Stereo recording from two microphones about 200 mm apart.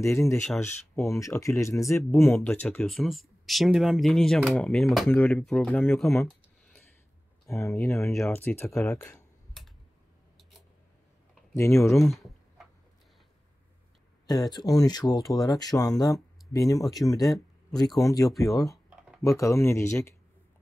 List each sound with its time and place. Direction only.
0.0 s speech: 15° left (ahead or behind)
7.8 s speech: 15° left (ahead or behind)
9.0 s computer keyboard: centre (ahead or behind)
11.5 s speech: 15° left (ahead or behind)
12.1 s a sound: centre (ahead or behind)
14.2 s speech: 20° left (ahead or behind)
18.3 s computer keyboard: centre (ahead or behind)
19.2 s speech: 15° left (ahead or behind)